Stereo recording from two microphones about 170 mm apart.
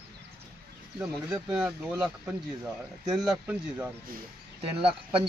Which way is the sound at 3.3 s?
10° right (ahead or behind).